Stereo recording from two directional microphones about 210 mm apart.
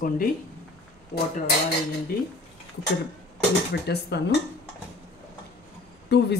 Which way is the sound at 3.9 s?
50° left (ahead or behind).